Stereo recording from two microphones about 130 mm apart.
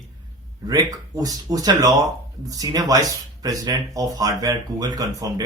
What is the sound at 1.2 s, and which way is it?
Speech, 30° right (ahead or behind).